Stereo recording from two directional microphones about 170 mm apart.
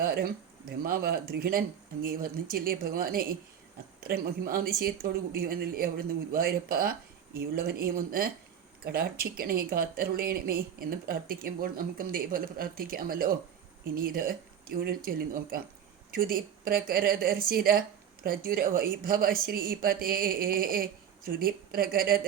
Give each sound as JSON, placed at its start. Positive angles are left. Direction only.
{"t": 0.0, "sound": "speech", "side_deg": -65}